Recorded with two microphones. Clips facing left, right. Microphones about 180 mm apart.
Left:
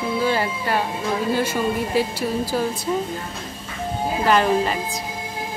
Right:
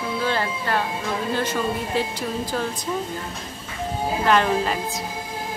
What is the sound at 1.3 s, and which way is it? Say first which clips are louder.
Speech: left 1 dB; 10° left (ahead or behind).